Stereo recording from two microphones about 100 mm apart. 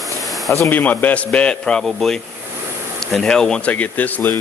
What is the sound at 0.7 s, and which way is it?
Speech, 20° left (ahead or behind).